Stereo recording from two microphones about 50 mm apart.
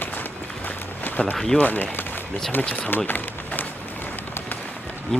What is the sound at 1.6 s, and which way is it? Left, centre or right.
Speech, left.